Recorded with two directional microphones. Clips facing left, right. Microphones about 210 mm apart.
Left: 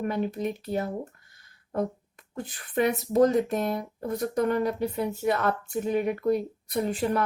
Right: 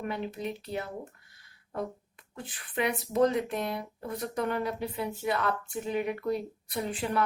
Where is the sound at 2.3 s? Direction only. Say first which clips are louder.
Left 6 dB; 40° left (ahead or behind).